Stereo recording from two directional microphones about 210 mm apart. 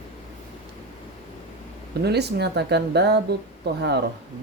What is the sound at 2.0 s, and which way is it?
A woman's voice, 50° right (ahead or behind).